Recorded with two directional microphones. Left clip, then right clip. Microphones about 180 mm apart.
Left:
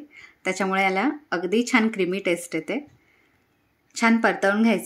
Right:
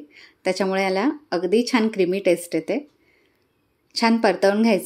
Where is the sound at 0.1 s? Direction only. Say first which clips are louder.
Right 4 dB; 15° right (ahead or behind).